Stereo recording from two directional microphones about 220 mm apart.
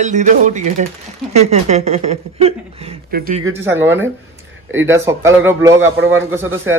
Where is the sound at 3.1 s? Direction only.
45° right (ahead or behind).